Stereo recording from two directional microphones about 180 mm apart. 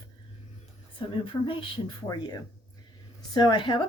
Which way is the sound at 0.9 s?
30° left (ahead or behind).